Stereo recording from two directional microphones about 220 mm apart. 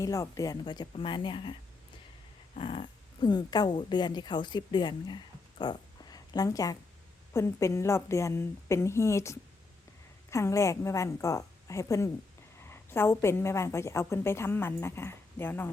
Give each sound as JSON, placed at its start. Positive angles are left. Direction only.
{"t": 0.0, "sound": "speech", "side_deg": 15}
{"t": 2.6, "sound": "a woman's voice", "side_deg": 25}